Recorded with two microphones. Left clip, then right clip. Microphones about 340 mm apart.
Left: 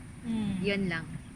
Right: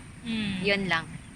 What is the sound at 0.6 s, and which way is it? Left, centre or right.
Speech, centre.